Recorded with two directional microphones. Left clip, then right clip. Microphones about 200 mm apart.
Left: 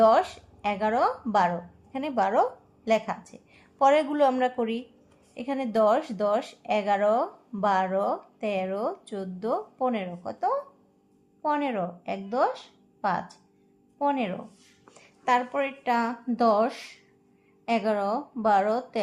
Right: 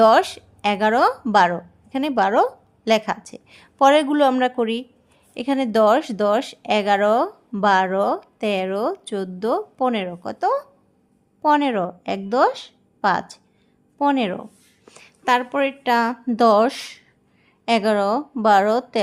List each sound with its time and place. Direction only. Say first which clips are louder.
0.0 s a woman's voice: right 6 dB; 55° right (ahead or behind)
14.8 s a woman's voice: right 6 dB; 45° right (ahead or behind)